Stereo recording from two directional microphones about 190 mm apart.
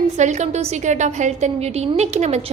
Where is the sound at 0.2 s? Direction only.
35° right (ahead or behind).